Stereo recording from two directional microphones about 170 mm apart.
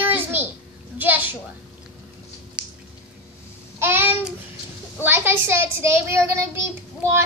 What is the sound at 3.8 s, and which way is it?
Babbling, 10° right (ahead or behind).